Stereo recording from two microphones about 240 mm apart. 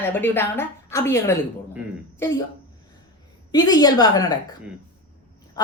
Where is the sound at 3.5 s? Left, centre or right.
Centre.